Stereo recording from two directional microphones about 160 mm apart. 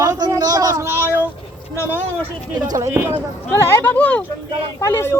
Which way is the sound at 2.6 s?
20° right (ahead or behind).